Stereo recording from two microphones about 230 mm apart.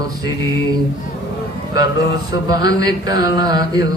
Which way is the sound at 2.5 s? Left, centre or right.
Centre.